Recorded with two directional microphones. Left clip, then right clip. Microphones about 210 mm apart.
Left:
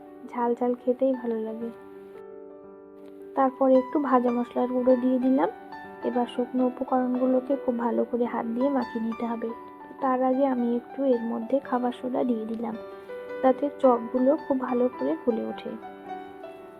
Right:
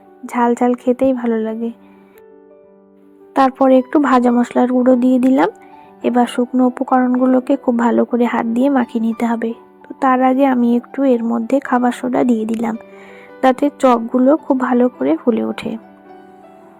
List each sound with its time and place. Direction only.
0.3 s speech: 40° right (ahead or behind)
3.3 s speech: 45° right (ahead or behind)